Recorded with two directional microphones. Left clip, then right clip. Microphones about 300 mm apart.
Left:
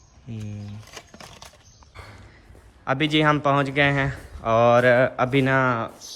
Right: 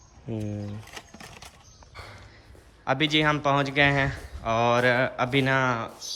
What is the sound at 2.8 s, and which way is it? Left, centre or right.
Speech, centre.